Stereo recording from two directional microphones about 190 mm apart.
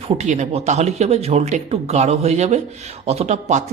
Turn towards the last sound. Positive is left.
turn(degrees=-35)  # may be behind; listen again after turning